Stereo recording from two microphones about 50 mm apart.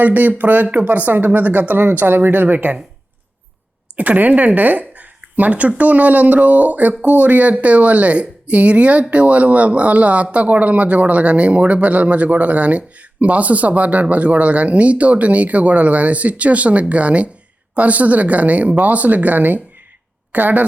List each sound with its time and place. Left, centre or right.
0.0 s speech: right
3.9 s speech: right